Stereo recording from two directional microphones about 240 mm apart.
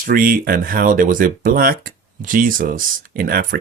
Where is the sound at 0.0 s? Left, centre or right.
Right.